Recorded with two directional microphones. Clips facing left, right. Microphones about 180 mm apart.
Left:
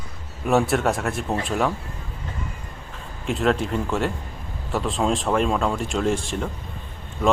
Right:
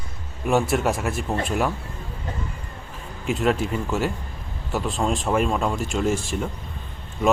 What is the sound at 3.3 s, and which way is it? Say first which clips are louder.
Speech: even; 5° right (ahead or behind).